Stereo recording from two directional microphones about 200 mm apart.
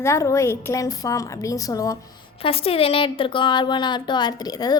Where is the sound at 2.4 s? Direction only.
30° left (ahead or behind).